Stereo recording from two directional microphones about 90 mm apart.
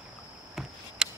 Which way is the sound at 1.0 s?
10° right (ahead or behind).